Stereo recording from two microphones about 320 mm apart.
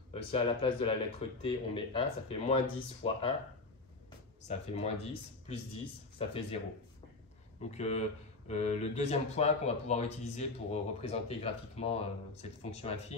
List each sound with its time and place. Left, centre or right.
0.1 s speech: centre
4.5 s speech: centre
6.1 s speech: centre
7.7 s speech: centre